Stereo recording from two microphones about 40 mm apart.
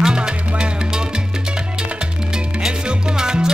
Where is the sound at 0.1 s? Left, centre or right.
Right.